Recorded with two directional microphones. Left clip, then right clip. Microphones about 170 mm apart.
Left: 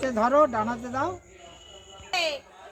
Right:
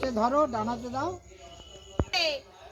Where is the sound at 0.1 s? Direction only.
15° left (ahead or behind).